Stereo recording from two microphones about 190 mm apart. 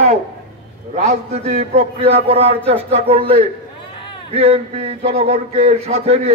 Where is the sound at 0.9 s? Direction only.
35° right (ahead or behind).